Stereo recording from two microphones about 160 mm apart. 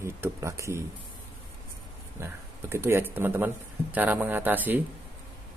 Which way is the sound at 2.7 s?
15° right (ahead or behind).